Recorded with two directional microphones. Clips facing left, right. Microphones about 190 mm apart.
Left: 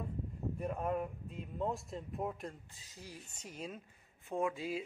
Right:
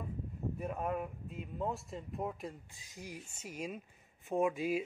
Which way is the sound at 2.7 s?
15° right (ahead or behind).